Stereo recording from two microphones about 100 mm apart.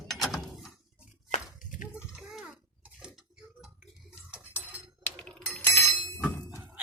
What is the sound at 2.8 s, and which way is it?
Tick-tock, 10° right (ahead or behind).